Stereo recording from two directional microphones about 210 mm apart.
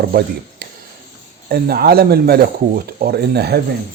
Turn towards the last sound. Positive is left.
turn(degrees=-50)  # may be behind; listen again after turning